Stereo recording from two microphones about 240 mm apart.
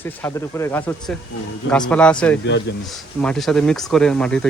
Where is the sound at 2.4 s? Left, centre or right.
Left.